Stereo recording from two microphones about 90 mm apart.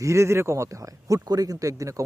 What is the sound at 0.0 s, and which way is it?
Speech, 30° right (ahead or behind).